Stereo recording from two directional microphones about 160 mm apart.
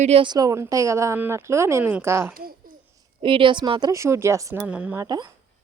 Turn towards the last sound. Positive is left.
turn(degrees=-25)  # may be behind; listen again after turning